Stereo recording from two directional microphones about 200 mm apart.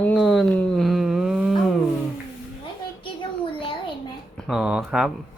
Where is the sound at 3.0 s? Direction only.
25° left (ahead or behind).